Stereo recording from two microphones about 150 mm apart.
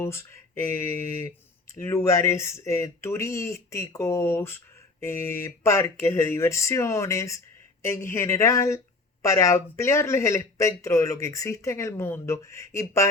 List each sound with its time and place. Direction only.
0.0 s speech: 15° left (ahead or behind)